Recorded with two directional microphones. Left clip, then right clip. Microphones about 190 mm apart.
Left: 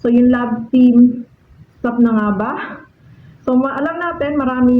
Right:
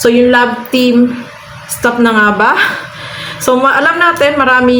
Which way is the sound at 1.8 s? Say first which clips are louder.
Right 8 dB; 15° right (ahead or behind).